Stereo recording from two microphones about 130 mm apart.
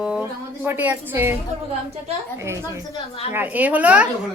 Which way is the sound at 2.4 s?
20° right (ahead or behind).